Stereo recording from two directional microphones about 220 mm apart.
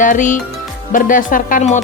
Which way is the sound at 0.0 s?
35° left (ahead or behind).